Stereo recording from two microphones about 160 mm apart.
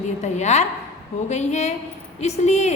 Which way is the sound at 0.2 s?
45° left (ahead or behind).